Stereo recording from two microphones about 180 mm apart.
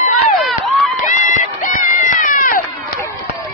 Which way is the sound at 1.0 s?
45° left (ahead or behind).